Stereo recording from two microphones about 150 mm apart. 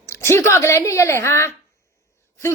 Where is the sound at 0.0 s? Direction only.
15° left (ahead or behind).